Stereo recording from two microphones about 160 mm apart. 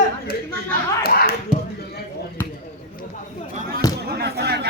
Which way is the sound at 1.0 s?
70° left (ahead or behind).